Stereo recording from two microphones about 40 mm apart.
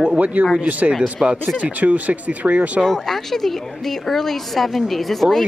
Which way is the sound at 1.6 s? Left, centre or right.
Right.